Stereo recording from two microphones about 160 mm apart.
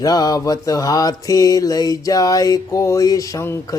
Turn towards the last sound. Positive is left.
turn(degrees=20)  # may be behind; listen again after turning